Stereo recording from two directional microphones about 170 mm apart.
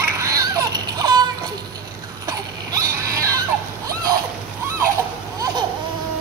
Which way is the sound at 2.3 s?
20° right (ahead or behind).